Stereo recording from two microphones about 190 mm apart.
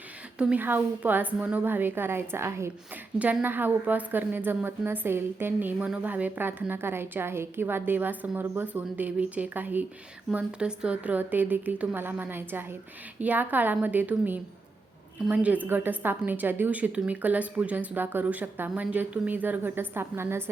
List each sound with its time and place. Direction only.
0.3 s a woman's voice: 10° right (ahead or behind)